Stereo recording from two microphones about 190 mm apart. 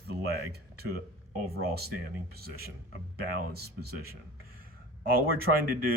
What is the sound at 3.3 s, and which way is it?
Speech, 55° right (ahead or behind).